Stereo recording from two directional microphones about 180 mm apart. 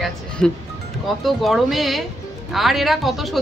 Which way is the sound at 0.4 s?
5° left (ahead or behind).